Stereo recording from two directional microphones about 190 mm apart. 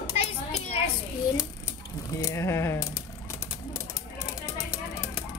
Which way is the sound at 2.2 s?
15° left (ahead or behind).